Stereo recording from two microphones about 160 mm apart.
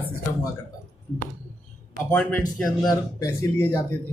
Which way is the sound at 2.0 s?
10° left (ahead or behind).